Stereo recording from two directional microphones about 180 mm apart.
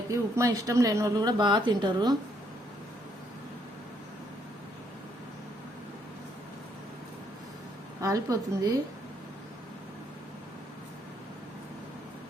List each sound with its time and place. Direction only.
0.1 s a woman's voice: 15° right (ahead or behind)
8.0 s a woman's voice: 20° right (ahead or behind)